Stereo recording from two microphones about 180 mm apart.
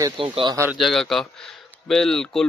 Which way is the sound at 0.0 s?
30° right (ahead or behind).